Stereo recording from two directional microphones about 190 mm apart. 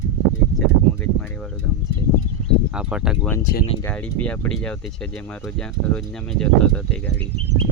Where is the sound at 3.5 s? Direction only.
55° left (ahead or behind).